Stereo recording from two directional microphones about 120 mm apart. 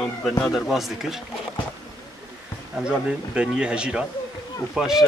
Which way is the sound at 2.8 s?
10° right (ahead or behind).